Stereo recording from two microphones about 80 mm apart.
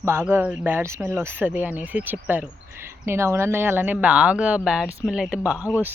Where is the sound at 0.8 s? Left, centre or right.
Right.